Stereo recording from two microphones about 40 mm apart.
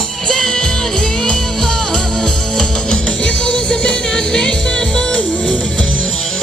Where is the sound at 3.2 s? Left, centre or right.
Left.